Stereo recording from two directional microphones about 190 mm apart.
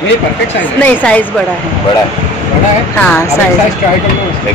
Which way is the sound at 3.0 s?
5° left (ahead or behind).